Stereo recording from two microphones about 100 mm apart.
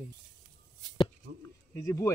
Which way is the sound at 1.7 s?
25° left (ahead or behind).